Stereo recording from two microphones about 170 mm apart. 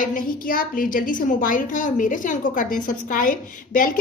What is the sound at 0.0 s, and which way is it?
A woman's voice, 55° left (ahead or behind).